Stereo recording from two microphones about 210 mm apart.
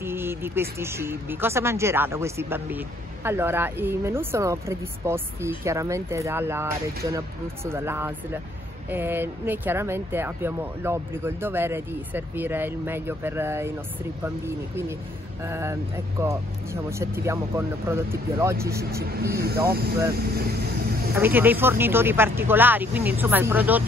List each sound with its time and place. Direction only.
0.0 s speech: 10° right (ahead or behind)
18.9 s speech: 45° right (ahead or behind)
21.1 s speech: 10° right (ahead or behind)